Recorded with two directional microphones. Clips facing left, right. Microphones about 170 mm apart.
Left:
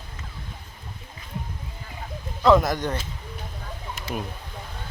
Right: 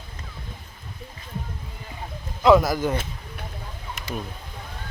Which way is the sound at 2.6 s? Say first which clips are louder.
Right 2 dB; 5° right (ahead or behind).